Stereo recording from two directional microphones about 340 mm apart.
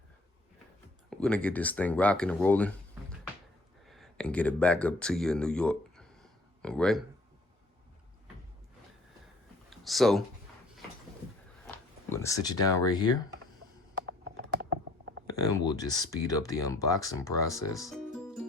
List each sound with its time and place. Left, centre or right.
1.1 s speech: centre
3.8 s speech: centre
9.6 s a sound: centre
11.7 s speech: centre
13.9 s typing: right
15.6 s speech: centre